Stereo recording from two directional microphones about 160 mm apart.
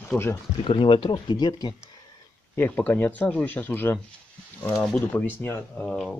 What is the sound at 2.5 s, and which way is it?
Speech, 10° left (ahead or behind).